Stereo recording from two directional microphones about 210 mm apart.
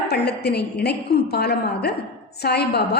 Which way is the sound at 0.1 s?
50° left (ahead or behind).